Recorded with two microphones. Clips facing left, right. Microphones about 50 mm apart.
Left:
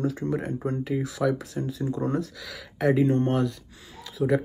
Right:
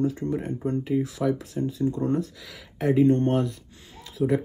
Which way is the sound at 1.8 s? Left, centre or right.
Left.